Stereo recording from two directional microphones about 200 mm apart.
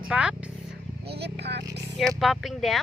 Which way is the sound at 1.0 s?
55° right (ahead or behind).